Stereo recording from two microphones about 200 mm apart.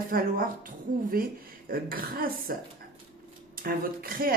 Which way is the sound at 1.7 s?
45° right (ahead or behind).